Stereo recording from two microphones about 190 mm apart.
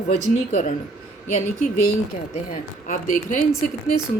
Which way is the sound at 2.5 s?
45° left (ahead or behind).